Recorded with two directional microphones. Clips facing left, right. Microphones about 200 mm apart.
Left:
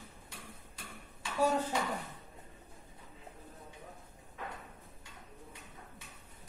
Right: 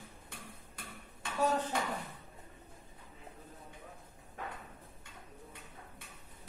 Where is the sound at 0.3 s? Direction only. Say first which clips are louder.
Right 1 dB; 55° right (ahead or behind).